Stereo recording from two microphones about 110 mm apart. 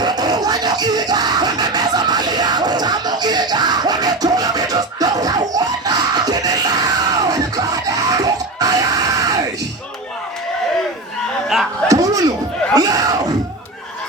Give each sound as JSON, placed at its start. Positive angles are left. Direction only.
{"t": 0.0, "sound": "screaming", "side_deg": -40}
{"t": 11.9, "sound": "a sound", "side_deg": -35}
{"t": 12.7, "sound": "crowd", "side_deg": -35}